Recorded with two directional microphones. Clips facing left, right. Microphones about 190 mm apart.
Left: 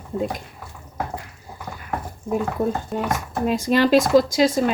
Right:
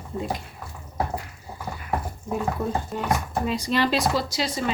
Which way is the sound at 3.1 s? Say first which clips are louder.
Left 2 dB; 45° left (ahead or behind).